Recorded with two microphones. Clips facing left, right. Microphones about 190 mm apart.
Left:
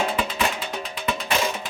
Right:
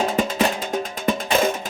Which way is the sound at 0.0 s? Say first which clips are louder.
Right 4 dB; 45° right (ahead or behind).